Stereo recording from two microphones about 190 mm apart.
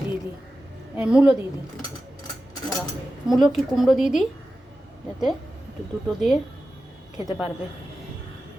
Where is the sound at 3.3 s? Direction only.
Centre (ahead or behind).